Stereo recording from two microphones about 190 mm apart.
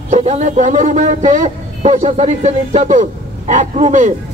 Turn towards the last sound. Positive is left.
turn(degrees=-40)  # may be behind; listen again after turning